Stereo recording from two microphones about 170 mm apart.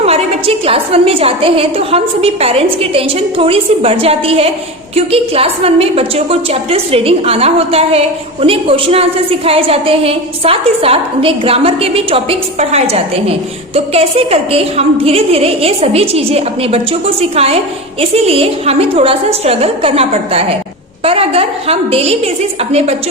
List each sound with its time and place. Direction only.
0.0 s a woman's voice: 35° right (ahead or behind)